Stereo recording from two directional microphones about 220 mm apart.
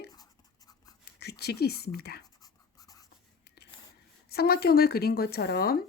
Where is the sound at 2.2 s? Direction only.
15° left (ahead or behind).